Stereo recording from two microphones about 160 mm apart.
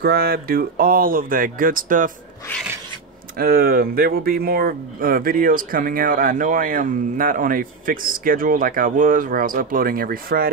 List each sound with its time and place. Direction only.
0.0 s speech: 70° right (ahead or behind)
3.3 s speech: 65° right (ahead or behind)